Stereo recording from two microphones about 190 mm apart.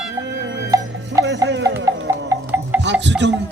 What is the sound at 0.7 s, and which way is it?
Music, 20° right (ahead or behind).